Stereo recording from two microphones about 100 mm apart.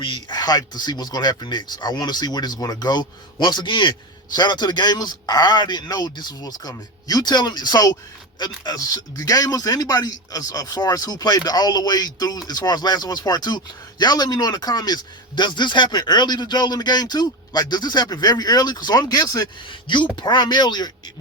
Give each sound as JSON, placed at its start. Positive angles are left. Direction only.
{"t": 0.0, "sound": "speech", "side_deg": 45}
{"t": 19.7, "sound": "speech", "side_deg": 50}